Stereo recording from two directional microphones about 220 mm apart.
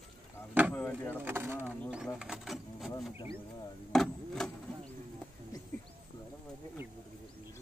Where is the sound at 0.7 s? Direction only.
10° left (ahead or behind).